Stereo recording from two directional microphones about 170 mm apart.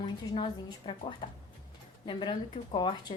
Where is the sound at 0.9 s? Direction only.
30° left (ahead or behind).